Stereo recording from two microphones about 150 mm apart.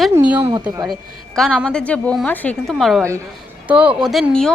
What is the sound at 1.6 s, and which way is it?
A woman's voice, 5° left (ahead or behind).